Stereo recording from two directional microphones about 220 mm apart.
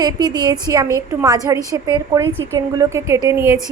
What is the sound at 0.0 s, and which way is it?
A woman's voice, 20° right (ahead or behind).